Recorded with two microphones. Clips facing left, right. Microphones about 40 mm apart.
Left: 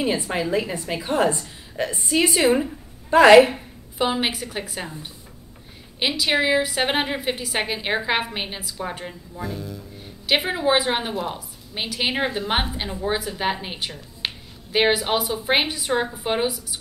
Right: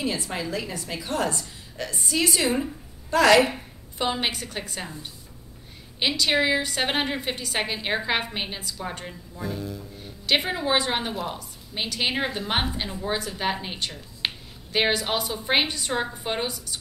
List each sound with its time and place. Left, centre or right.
0.0 s a woman's voice: left
3.5 s speech: centre
5.9 s a woman's voice: centre
14.2 s a sound: centre
14.7 s a woman's voice: centre